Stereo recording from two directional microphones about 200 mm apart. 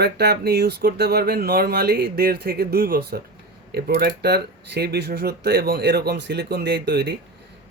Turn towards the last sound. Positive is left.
turn(degrees=-55)  # may be behind; listen again after turning